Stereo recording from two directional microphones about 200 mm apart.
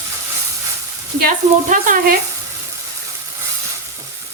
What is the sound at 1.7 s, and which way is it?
Speech, 40° right (ahead or behind).